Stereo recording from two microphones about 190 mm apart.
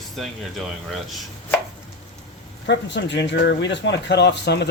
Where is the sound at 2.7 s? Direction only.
65° left (ahead or behind).